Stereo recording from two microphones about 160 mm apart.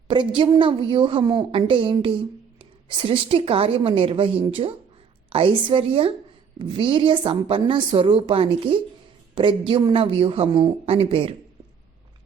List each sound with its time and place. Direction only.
0.1 s a woman's voice: 30° right (ahead or behind)